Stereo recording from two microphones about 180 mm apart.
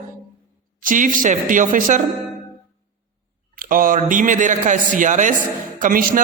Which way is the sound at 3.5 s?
50° right (ahead or behind).